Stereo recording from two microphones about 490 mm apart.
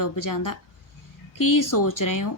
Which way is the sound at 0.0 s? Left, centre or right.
Left.